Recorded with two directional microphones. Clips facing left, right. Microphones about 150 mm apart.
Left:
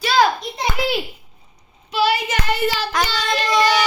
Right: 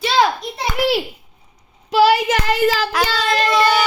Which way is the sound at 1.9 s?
90° right.